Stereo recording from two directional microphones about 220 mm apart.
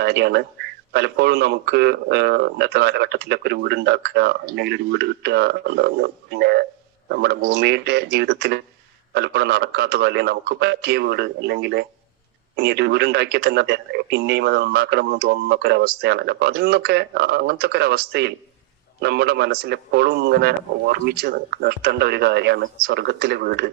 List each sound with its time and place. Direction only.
0.0 s a man's voice: 50° right (ahead or behind)